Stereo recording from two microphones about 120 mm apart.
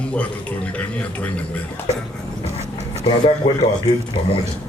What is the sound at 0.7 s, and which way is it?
Speech, 10° left (ahead or behind).